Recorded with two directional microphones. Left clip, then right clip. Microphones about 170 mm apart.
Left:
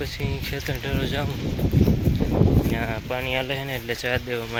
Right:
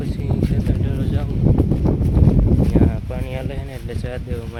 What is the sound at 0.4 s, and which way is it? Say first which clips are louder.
Speech: right 4 dB; centre (ahead or behind).